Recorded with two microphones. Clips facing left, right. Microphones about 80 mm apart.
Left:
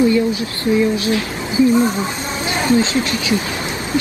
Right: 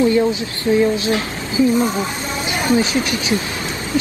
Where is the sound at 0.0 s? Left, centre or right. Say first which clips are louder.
Even; right.